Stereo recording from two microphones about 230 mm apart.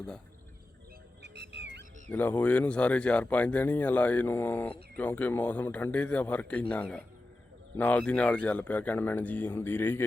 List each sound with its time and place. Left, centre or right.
1.2 s music: right
2.0 s speech: centre